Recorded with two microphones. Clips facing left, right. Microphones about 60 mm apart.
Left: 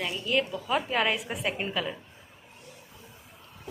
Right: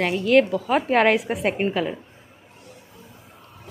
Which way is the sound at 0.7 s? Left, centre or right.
Right.